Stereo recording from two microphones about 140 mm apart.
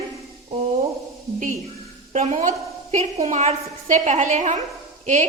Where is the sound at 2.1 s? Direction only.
60° right (ahead or behind).